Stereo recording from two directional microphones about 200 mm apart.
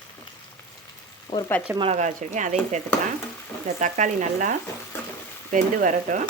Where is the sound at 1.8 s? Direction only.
35° right (ahead or behind).